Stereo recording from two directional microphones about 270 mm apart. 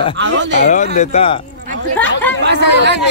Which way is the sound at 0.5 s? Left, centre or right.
Left.